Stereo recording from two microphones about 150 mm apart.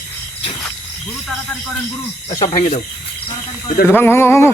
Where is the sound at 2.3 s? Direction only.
25° left (ahead or behind).